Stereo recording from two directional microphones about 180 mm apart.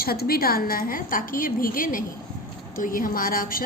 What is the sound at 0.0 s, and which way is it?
A woman's voice, 55° left (ahead or behind).